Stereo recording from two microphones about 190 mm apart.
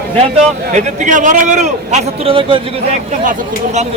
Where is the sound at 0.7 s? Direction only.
40° right (ahead or behind).